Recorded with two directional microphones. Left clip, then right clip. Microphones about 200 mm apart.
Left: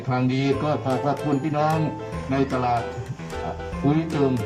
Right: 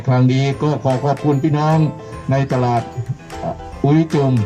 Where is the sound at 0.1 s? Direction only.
45° right (ahead or behind).